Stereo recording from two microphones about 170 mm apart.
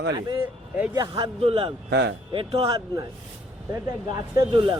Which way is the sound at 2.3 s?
30° right (ahead or behind).